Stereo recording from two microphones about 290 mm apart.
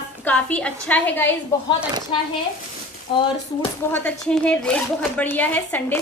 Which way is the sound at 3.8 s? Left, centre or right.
Centre.